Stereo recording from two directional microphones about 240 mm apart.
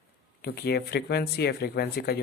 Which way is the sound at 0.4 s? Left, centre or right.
Left.